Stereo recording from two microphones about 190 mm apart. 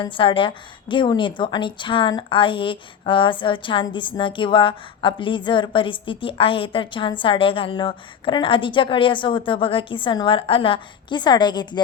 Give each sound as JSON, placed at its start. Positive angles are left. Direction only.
{"t": 0.0, "sound": "a woman's voice", "side_deg": 25}